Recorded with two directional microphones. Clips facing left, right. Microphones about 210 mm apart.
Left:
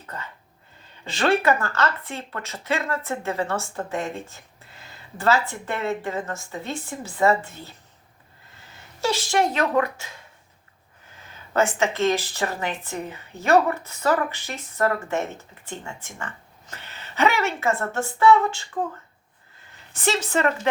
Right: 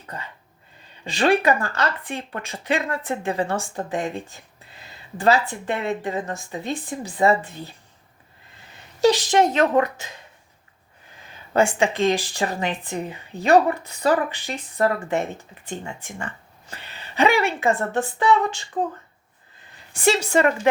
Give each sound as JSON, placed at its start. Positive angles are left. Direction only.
{"t": 1.0, "sound": "speech", "side_deg": -15}
{"t": 8.7, "sound": "speech", "side_deg": -15}
{"t": 11.2, "sound": "a woman's voice", "side_deg": -15}